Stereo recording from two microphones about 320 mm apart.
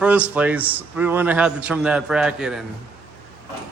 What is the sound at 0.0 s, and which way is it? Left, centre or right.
A man's voice, centre.